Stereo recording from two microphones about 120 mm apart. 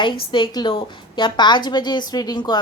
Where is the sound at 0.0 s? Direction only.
45° left (ahead or behind).